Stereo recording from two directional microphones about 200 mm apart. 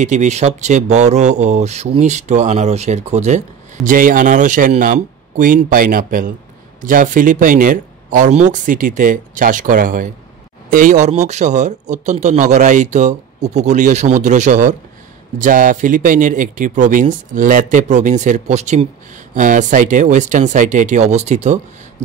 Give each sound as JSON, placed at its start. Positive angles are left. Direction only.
{"t": 0.0, "sound": "speech", "side_deg": -35}